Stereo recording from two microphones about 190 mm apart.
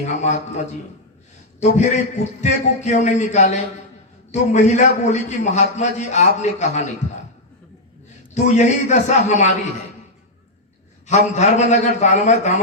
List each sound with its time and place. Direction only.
0.0 s a man's voice: 35° left (ahead or behind)
8.3 s a man's voice: 40° left (ahead or behind)
11.0 s a man's voice: 35° left (ahead or behind)